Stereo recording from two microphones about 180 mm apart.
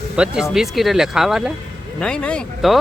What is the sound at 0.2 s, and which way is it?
Speech, 5° right (ahead or behind).